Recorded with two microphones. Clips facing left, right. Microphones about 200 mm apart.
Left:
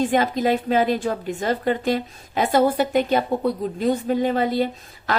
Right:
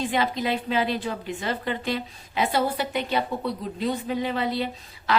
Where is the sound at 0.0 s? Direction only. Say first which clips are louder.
Left 6 dB; 45° left (ahead or behind).